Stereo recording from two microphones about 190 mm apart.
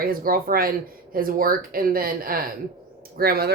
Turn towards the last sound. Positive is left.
turn(degrees=-55)  # may be behind; listen again after turning